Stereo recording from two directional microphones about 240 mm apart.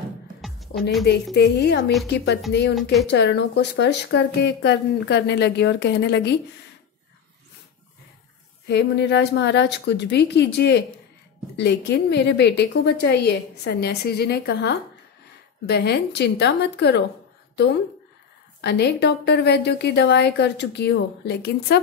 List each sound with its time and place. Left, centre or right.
1.3 s speech: left
2.7 s a woman's voice: centre
3.1 s speech: left
8.6 s speech: left
18.6 s speech: left